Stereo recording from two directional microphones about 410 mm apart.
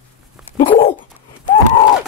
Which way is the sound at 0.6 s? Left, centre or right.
Centre.